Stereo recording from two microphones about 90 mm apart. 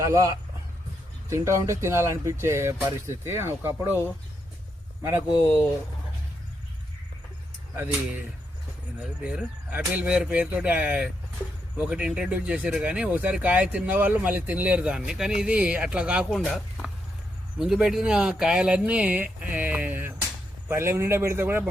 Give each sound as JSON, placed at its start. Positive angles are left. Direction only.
{"t": 0.0, "sound": "speech", "side_deg": -35}
{"t": 7.8, "sound": "speech", "side_deg": -20}
{"t": 9.2, "sound": "speech", "side_deg": -15}
{"t": 16.3, "sound": "speech", "side_deg": 0}